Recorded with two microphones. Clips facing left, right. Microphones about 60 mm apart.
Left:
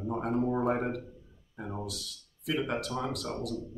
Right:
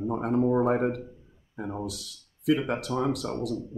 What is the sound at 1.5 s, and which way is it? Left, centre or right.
Speech, centre.